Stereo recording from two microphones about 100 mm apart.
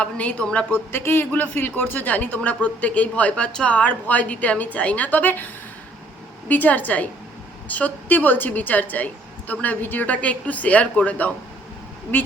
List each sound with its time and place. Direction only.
0.0 s speech: 15° left (ahead or behind)
6.5 s speech: 15° left (ahead or behind)